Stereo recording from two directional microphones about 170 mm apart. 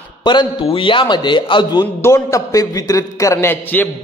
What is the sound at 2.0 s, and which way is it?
A man's voice, 15° left (ahead or behind).